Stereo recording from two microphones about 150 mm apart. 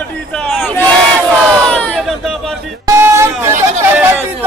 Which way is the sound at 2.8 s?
20° right (ahead or behind).